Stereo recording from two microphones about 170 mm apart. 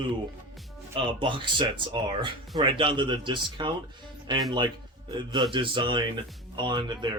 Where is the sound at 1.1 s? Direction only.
30° right (ahead or behind).